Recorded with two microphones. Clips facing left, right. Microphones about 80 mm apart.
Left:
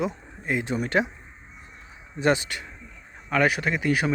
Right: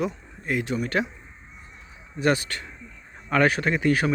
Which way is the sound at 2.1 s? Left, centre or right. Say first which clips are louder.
Even; left.